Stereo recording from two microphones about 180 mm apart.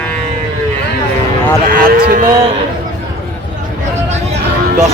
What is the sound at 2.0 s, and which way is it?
Speech, 50° right (ahead or behind).